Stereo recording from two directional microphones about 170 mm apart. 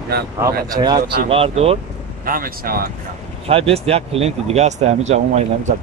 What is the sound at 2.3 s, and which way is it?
Speech, 60° right (ahead or behind).